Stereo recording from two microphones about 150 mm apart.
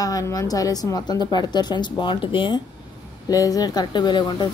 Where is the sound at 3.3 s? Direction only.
25° left (ahead or behind).